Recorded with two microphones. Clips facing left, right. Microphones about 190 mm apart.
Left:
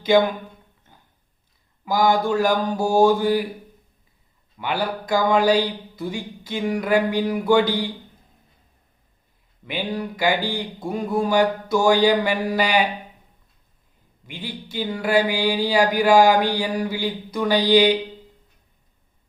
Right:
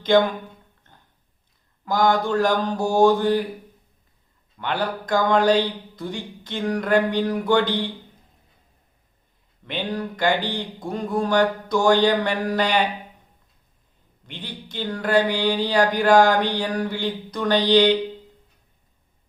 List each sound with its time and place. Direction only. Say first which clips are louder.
0.1 s speech: even; 5° left (ahead or behind)
1.8 s speech: left 1 dB; 5° left (ahead or behind)
4.5 s speech: left 1 dB; 5° left (ahead or behind)
9.6 s speech: left 1 dB; 5° left (ahead or behind)
14.3 s speech: left 3 dB; 10° left (ahead or behind)